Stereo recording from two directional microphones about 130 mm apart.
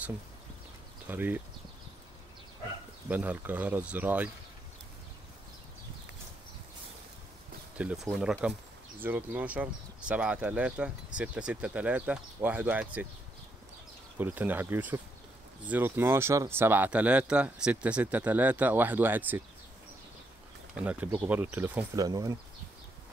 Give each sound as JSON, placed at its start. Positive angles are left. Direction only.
{"t": 1.0, "sound": "speech", "side_deg": -15}
{"t": 3.1, "sound": "speech", "side_deg": -15}
{"t": 7.7, "sound": "speech", "side_deg": -5}
{"t": 14.1, "sound": "speech", "side_deg": -15}
{"t": 20.7, "sound": "speech", "side_deg": -10}
{"t": 21.9, "sound": "speech", "side_deg": -25}